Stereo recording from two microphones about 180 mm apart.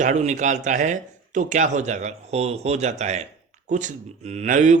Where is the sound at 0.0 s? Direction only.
40° right (ahead or behind).